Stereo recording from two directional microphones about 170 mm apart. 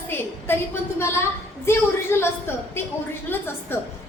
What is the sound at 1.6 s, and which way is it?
A woman's voice, 15° left (ahead or behind).